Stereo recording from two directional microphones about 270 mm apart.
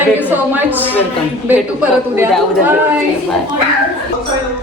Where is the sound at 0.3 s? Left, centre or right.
Centre.